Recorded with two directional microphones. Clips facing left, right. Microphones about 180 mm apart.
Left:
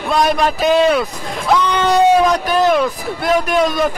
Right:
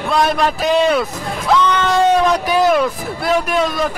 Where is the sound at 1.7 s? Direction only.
15° left (ahead or behind).